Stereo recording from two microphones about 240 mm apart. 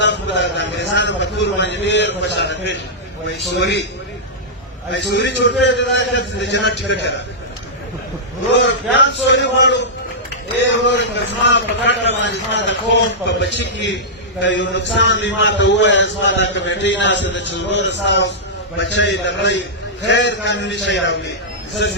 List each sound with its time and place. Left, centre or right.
0.0 s a sound: left
3.6 s a man's voice: left
4.9 s a man's voice: left
8.5 s a man's voice: left